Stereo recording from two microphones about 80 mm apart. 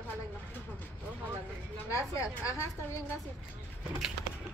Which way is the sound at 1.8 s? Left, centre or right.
Left.